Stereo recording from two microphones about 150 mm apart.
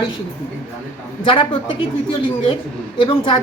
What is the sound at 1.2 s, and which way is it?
Speech, 35° left (ahead or behind).